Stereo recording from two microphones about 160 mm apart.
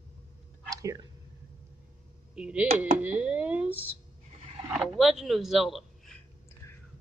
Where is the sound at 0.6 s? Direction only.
20° right (ahead or behind).